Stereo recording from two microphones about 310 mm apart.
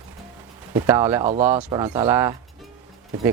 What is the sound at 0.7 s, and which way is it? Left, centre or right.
Speech, centre.